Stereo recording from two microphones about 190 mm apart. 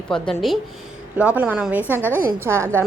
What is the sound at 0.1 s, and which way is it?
A woman's voice, centre (ahead or behind).